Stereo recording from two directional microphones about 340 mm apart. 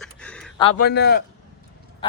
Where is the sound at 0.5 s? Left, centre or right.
Centre.